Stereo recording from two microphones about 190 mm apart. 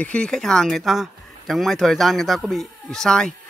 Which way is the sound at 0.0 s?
5° left (ahead or behind).